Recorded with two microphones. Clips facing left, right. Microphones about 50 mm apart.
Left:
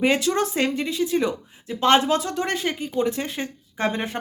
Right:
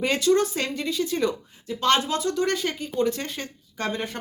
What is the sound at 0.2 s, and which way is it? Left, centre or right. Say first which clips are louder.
Speech: right 1 dB; left.